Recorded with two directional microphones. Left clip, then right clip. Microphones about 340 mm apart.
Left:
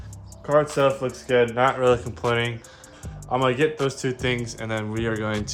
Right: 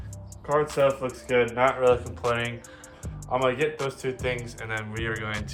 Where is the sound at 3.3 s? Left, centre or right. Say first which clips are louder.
Left 3 dB; left.